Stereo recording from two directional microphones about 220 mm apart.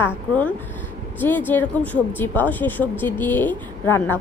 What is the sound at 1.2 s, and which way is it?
Speech, 10° left (ahead or behind).